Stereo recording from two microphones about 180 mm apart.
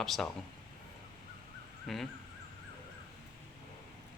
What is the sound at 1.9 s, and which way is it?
Speech, centre (ahead or behind).